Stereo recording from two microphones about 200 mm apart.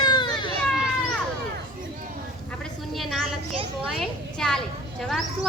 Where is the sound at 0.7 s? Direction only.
Centre (ahead or behind).